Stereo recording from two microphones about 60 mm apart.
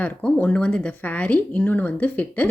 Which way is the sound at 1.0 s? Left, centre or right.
Left.